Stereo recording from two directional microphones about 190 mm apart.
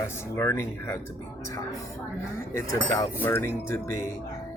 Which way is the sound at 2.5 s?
15° left (ahead or behind).